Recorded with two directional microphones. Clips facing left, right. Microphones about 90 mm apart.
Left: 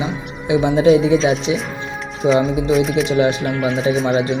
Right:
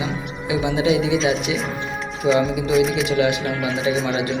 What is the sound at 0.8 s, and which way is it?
Speech, 35° left (ahead or behind).